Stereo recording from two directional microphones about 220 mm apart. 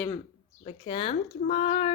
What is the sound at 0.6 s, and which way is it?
Speech, 25° left (ahead or behind).